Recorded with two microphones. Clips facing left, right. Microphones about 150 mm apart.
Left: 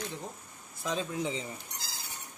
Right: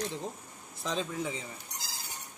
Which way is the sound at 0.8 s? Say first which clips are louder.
Left 1 dB; 15° left (ahead or behind).